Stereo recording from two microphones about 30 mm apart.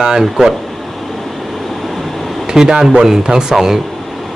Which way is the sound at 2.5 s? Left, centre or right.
Centre.